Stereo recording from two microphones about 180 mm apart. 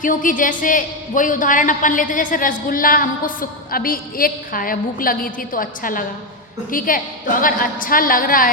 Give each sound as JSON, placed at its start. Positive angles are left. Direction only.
{"t": 0.0, "sound": "a man's voice", "side_deg": 45}